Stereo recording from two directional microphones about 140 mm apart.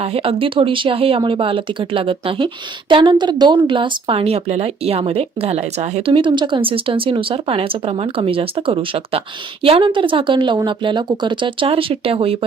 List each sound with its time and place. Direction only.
0.0 s speech: 45° right (ahead or behind)